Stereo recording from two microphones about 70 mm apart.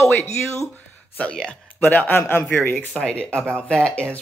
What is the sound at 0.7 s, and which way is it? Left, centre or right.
Speech, centre.